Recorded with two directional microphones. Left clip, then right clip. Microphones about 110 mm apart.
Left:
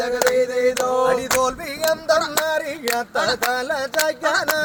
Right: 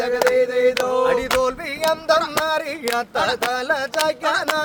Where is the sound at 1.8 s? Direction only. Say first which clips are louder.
Even; 15° right (ahead or behind).